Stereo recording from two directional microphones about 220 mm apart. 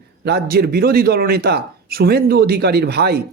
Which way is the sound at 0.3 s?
45° right (ahead or behind).